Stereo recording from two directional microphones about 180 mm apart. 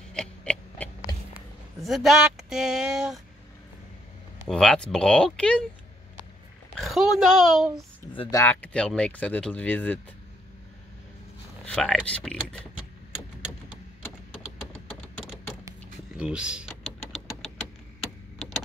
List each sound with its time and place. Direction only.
0.1 s a sound: 5° left (ahead or behind)
1.3 s speech: centre (ahead or behind)
4.5 s speech: 5° left (ahead or behind)
6.8 s speech: centre (ahead or behind)
8.1 s speech: 30° left (ahead or behind)
8.4 s speech: 10° left (ahead or behind)
11.6 s speech: 5° left (ahead or behind)
16.2 s typing: 5° right (ahead or behind)